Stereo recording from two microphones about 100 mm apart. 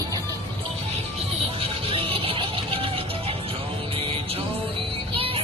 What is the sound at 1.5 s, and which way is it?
Music, 65° right (ahead or behind).